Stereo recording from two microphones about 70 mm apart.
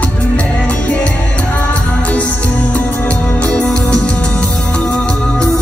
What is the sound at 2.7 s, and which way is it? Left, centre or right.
Music, centre.